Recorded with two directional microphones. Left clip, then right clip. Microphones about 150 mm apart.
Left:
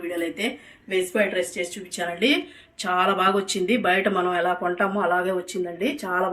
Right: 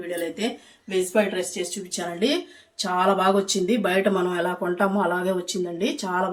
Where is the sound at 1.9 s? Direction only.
65° right (ahead or behind).